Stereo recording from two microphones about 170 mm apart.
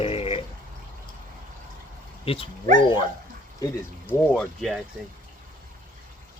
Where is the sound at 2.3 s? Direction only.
35° left (ahead or behind).